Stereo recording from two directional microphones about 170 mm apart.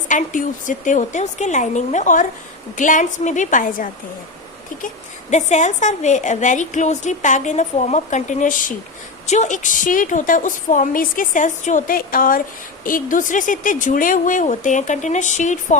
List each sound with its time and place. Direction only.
0.1 s a woman's voice: 50° left (ahead or behind)
5.3 s a woman's voice: 45° left (ahead or behind)